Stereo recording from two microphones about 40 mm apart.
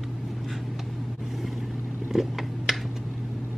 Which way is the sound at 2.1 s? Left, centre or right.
Centre.